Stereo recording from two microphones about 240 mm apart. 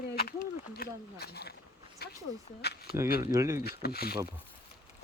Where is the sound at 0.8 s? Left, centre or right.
Left.